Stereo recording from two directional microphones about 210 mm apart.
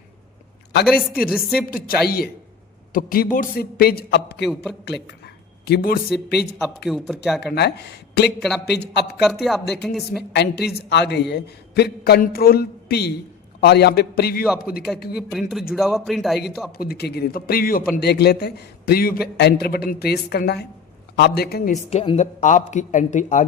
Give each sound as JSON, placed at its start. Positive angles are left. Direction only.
{"t": 0.9, "sound": "speech", "side_deg": 0}
{"t": 1.6, "sound": "a man's voice", "side_deg": 45}
{"t": 4.4, "sound": "speech", "side_deg": 0}
{"t": 4.9, "sound": "a sound", "side_deg": 55}
{"t": 6.8, "sound": "speech", "side_deg": 0}
{"t": 7.4, "sound": "a man's voice", "side_deg": 50}
{"t": 8.4, "sound": "speech", "side_deg": 0}
{"t": 8.6, "sound": "a man's voice", "side_deg": 50}
{"t": 9.2, "sound": "speech", "side_deg": 0}
{"t": 10.1, "sound": "a man's voice", "side_deg": 50}
{"t": 15.1, "sound": "speech", "side_deg": 0}
{"t": 16.7, "sound": "a man's voice", "side_deg": 45}
{"t": 21.8, "sound": "speech", "side_deg": 30}